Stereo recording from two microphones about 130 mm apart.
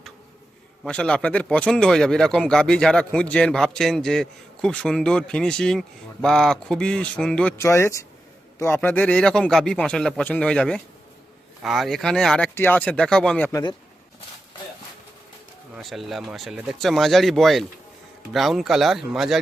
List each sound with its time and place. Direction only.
0.9 s speech: 10° left (ahead or behind)
7.6 s a man's voice: 20° left (ahead or behind)
13.5 s speech: 35° left (ahead or behind)
15.7 s speech: centre (ahead or behind)